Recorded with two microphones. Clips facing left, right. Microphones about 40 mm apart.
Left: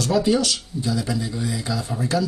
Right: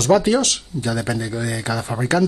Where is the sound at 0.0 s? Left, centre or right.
Right.